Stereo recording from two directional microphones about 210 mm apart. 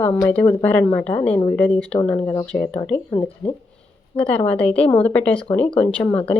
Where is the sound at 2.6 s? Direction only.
5° left (ahead or behind).